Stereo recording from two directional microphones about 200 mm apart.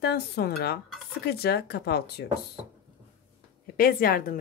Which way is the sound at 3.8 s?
45° left (ahead or behind).